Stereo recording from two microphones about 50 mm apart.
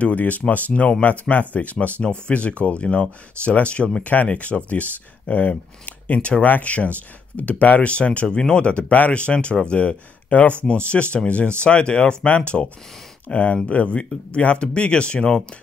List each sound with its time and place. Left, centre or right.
0.0 s speech: left